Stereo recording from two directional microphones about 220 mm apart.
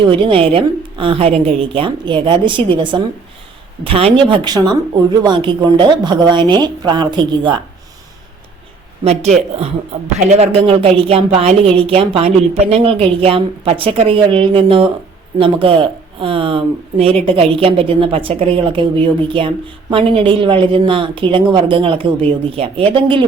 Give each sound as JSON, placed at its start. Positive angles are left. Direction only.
{"t": 0.0, "sound": "speech", "side_deg": -25}
{"t": 9.0, "sound": "speech", "side_deg": -30}